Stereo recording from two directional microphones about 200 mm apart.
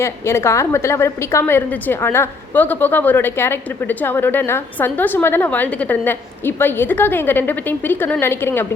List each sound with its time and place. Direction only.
0.0 s a woman's voice: 15° left (ahead or behind)